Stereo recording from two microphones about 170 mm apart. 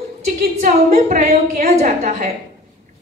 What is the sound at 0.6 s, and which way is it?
A woman's voice, 45° right (ahead or behind).